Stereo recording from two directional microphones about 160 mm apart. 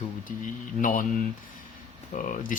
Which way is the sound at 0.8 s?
60° left (ahead or behind).